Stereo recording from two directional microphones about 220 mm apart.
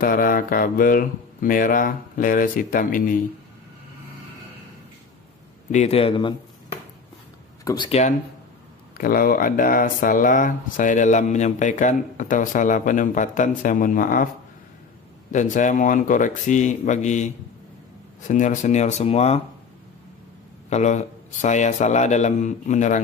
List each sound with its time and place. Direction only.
0.0 s speech: 40° left (ahead or behind)
5.7 s a man's voice: 30° left (ahead or behind)
7.6 s a man's voice: 20° left (ahead or behind)
8.9 s speech: 40° left (ahead or behind)
15.3 s speech: 35° left (ahead or behind)
20.7 s speech: 30° left (ahead or behind)